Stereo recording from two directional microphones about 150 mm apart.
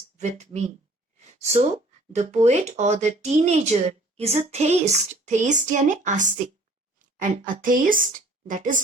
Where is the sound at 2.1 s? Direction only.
50° right (ahead or behind).